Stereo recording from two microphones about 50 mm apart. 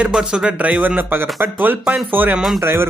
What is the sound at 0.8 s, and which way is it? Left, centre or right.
Speech, right.